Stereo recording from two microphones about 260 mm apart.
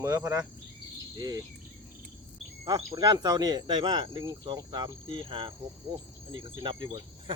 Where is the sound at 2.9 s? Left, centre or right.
Centre.